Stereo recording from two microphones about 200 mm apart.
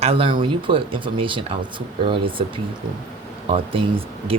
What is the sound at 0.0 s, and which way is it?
Speech, 25° right (ahead or behind).